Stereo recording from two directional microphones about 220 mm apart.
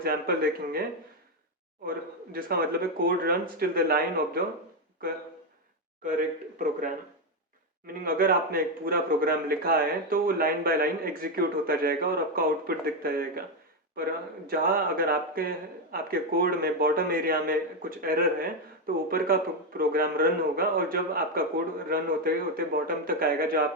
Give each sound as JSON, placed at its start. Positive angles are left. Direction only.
{"t": 0.0, "sound": "a man's voice", "side_deg": -45}
{"t": 2.3, "sound": "a man's voice", "side_deg": -45}
{"t": 6.1, "sound": "a man's voice", "side_deg": -35}